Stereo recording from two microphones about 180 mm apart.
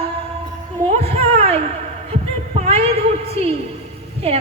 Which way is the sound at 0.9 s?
35° right (ahead or behind).